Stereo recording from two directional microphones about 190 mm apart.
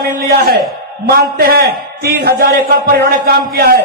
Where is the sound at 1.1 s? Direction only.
55° right (ahead or behind).